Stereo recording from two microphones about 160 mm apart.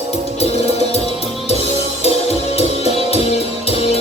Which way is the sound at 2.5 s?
40° left (ahead or behind).